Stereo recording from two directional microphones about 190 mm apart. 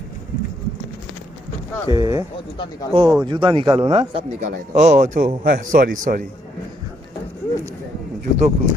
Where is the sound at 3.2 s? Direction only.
25° right (ahead or behind); by 6.2 s 45° right (ahead or behind).